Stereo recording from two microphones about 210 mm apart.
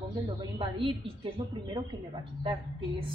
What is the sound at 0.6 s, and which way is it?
Speech, 25° right (ahead or behind).